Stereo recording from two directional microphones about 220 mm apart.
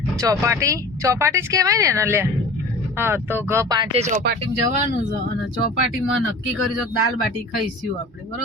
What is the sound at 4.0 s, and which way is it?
Speech, 35° right (ahead or behind).